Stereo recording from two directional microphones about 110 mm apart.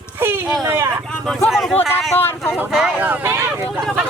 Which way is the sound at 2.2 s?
20° left (ahead or behind).